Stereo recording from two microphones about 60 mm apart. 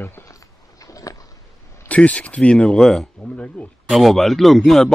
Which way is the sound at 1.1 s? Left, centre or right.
Left.